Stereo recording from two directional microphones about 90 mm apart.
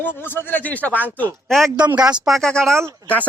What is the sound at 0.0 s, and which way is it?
Speech, 25° left (ahead or behind).